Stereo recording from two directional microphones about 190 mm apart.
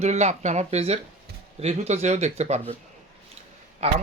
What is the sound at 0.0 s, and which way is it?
Speech, 35° right (ahead or behind).